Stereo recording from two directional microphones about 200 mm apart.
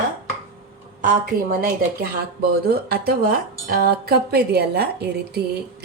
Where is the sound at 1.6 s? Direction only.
50° right (ahead or behind).